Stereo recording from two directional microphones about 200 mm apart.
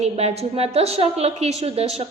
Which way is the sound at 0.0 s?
30° right (ahead or behind).